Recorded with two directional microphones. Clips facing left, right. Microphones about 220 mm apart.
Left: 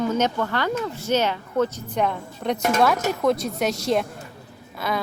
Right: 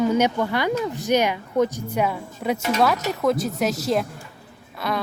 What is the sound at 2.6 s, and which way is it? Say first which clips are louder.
Speech: left 2 dB; 50° left (ahead or behind).